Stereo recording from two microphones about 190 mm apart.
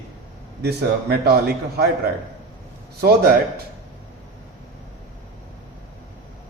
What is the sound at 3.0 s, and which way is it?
Speech, 55° right (ahead or behind).